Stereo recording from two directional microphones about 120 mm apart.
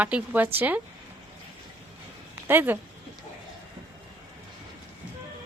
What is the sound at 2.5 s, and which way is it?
Speech, 15° right (ahead or behind).